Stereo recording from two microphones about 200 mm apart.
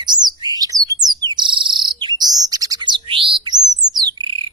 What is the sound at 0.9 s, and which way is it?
Bird, 20° right (ahead or behind).